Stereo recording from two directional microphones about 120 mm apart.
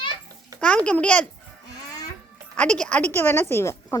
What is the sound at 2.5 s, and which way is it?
A woman's voice, 10° left (ahead or behind).